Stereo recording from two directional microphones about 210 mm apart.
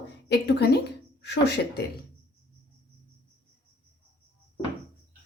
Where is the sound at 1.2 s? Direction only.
55° left (ahead or behind).